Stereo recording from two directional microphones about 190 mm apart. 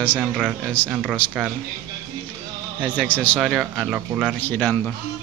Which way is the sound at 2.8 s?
10° left (ahead or behind).